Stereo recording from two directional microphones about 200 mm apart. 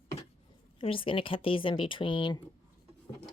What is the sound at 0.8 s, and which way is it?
Speech, 25° left (ahead or behind).